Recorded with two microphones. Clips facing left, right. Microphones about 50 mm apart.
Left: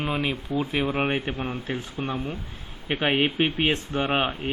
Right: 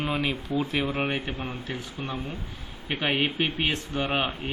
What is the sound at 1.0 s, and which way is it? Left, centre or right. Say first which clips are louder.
Speech: left 3 dB; left.